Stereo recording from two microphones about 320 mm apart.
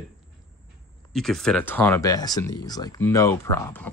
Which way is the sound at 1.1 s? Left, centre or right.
Centre.